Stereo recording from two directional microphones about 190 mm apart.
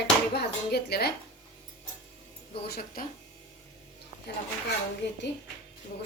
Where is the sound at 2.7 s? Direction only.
50° left (ahead or behind).